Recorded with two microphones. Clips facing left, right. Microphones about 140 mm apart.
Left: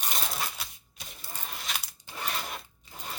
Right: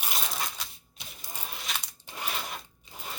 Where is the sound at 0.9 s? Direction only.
15° right (ahead or behind).